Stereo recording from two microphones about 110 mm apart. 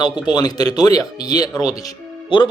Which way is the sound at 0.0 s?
40° left (ahead or behind).